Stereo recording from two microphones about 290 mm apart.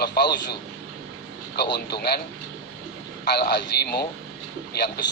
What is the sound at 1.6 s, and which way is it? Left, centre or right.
Speech, left.